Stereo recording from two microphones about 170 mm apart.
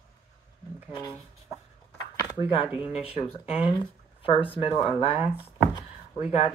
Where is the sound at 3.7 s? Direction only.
30° left (ahead or behind).